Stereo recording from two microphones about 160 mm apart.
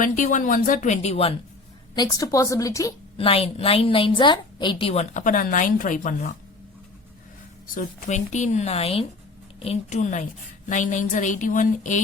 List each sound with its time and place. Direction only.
0.0 s speech: 50° left (ahead or behind)
2.0 s speech: 20° left (ahead or behind)
3.2 s a woman's voice: 35° left (ahead or behind); by 6.3 s 55° left (ahead or behind)
7.8 s speech: 50° left (ahead or behind)